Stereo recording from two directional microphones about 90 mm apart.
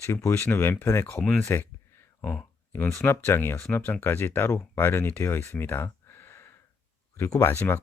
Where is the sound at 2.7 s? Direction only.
25° left (ahead or behind).